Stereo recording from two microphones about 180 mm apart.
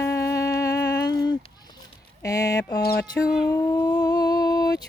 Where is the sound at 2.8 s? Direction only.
60° left (ahead or behind).